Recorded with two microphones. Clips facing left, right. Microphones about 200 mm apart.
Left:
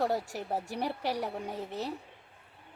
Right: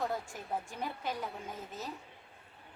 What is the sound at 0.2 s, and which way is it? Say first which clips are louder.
Speech: left 4 dB; 75° left (ahead or behind).